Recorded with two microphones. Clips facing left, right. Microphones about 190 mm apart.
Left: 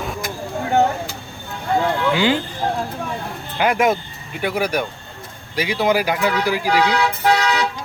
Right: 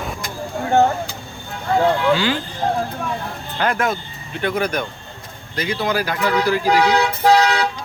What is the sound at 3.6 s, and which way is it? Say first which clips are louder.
Speech: left 3 dB; 15° left (ahead or behind).